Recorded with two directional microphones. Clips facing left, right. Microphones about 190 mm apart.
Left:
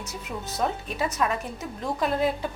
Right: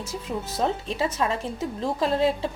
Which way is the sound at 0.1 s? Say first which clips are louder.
Right 6 dB; 30° right (ahead or behind).